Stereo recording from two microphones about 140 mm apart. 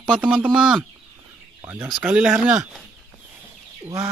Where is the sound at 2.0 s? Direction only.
5° right (ahead or behind).